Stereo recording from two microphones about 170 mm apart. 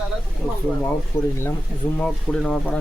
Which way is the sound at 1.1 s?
15° left (ahead or behind).